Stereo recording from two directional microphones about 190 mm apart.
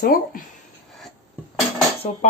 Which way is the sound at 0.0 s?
50° left (ahead or behind).